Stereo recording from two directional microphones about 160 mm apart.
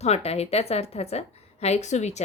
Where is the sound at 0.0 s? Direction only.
40° left (ahead or behind).